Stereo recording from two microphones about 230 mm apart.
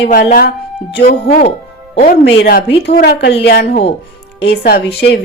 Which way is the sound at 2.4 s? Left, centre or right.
Left.